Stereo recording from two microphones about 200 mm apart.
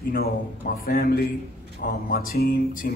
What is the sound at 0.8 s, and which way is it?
Speech, 45° left (ahead or behind).